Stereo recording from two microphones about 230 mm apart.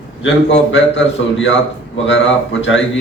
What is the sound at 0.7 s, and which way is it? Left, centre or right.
Speech, left.